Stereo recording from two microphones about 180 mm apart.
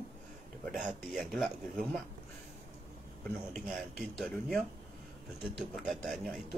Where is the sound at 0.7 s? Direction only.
Centre (ahead or behind).